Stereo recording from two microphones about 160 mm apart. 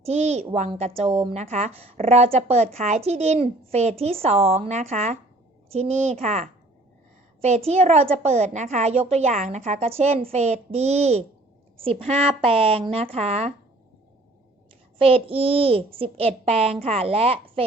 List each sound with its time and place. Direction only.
0.0 s a woman's voice: 45° right (ahead or behind)
14.9 s a child's voice: 35° right (ahead or behind)